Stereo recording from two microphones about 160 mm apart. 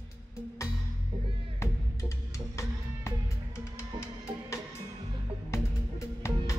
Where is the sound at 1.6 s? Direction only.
20° left (ahead or behind).